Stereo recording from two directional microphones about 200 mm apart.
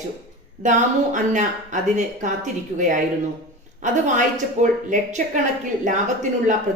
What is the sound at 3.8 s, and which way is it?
Speech, 40° right (ahead or behind).